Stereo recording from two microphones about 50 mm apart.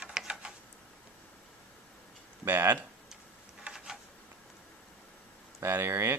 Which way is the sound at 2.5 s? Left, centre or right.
Right.